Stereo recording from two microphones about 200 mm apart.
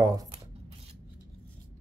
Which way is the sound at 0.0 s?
20° right (ahead or behind).